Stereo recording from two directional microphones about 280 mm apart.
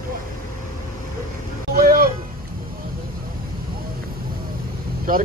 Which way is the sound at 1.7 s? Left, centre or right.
Right.